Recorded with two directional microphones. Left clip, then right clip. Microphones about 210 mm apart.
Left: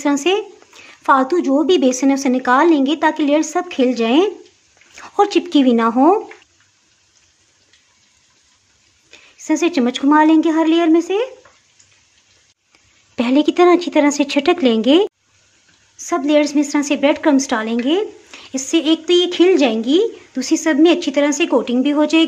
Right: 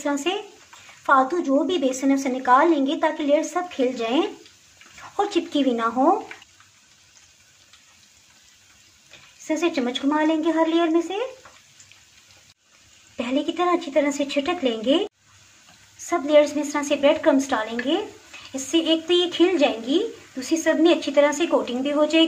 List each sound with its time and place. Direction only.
0.0 s a woman's voice: 55° left (ahead or behind)
9.5 s a woman's voice: 55° left (ahead or behind)
13.1 s a woman's voice: 45° left (ahead or behind)
16.1 s a woman's voice: 55° left (ahead or behind)